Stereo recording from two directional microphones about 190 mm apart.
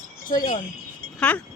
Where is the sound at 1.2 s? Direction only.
5° left (ahead or behind).